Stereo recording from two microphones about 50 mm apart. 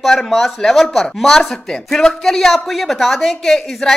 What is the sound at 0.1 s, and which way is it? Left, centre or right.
Speech, centre.